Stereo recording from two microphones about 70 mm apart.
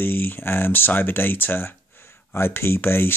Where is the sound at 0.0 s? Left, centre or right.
Left.